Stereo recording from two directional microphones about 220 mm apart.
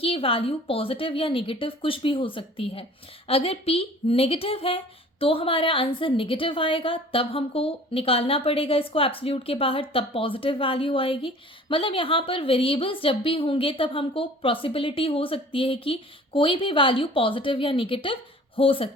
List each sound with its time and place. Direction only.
0.0 s a woman's voice: 25° left (ahead or behind)